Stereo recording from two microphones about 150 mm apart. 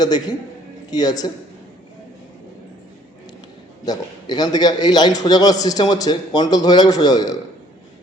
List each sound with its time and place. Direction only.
0.0 s a man's voice: 25° left (ahead or behind)
3.8 s a man's voice: 25° left (ahead or behind)